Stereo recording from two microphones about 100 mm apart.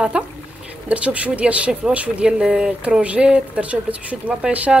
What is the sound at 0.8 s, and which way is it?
Speech, 15° right (ahead or behind).